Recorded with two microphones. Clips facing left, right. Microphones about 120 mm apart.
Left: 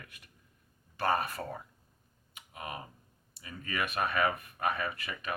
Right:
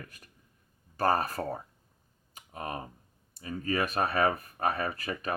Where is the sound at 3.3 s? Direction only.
35° right (ahead or behind).